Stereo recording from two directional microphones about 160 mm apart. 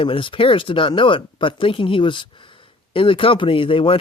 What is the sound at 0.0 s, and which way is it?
A man's voice, 35° left (ahead or behind).